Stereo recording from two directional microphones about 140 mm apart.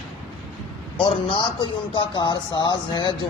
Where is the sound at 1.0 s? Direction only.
40° left (ahead or behind).